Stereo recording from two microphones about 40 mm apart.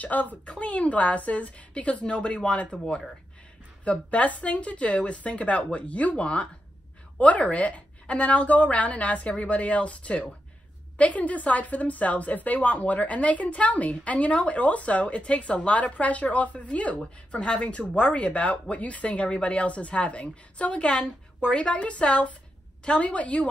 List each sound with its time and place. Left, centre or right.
0.0 s speech: left
0.6 s a woman's voice: left
3.8 s a woman's voice: left